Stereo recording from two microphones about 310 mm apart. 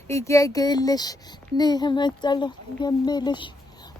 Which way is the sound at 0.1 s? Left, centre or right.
Centre.